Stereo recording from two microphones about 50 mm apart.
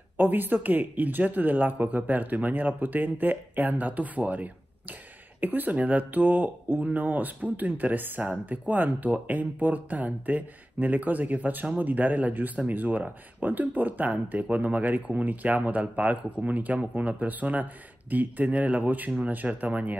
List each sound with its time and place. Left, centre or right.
0.2 s speech: right